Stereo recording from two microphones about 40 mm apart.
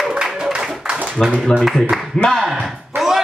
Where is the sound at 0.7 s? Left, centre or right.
Centre.